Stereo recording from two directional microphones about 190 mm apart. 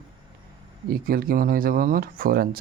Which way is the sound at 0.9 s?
50° right (ahead or behind).